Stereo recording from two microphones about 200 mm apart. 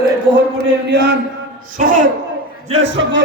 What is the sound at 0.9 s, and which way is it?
Speech, 55° right (ahead or behind).